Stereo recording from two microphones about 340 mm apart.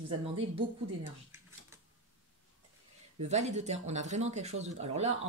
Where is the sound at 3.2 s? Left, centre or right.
Centre.